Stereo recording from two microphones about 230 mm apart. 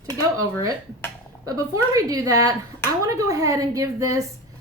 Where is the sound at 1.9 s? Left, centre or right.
Centre.